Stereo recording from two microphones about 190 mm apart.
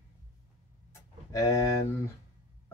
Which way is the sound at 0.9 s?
15° left (ahead or behind).